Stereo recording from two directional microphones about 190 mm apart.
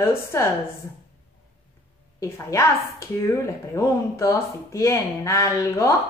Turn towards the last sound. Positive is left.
turn(degrees=15)  # may be behind; listen again after turning